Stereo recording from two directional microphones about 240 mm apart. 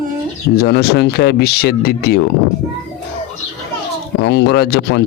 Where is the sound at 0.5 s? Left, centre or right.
Left.